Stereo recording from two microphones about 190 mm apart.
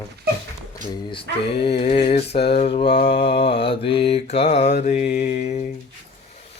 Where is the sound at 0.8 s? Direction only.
40° right (ahead or behind).